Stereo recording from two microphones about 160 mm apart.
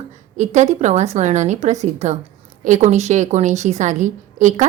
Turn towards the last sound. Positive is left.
turn(degrees=-50)  # may be behind; listen again after turning